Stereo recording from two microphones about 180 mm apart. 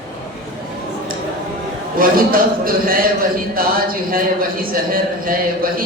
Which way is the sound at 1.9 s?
55° right (ahead or behind).